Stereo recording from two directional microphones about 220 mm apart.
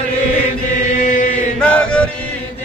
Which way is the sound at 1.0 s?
35° left (ahead or behind).